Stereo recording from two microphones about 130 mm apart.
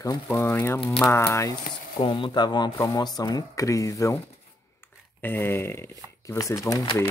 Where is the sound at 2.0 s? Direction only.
40° left (ahead or behind); by 4.1 s 25° left (ahead or behind).